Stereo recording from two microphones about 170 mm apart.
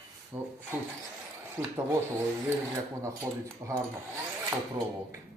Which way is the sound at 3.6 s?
15° right (ahead or behind).